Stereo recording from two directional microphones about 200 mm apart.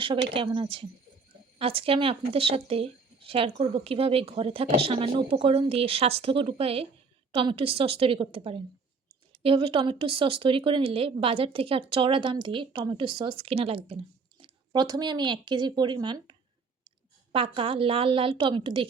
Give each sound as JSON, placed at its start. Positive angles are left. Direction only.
{"t": 0.3, "sound": "speech", "side_deg": -25}
{"t": 17.3, "sound": "speech", "side_deg": -25}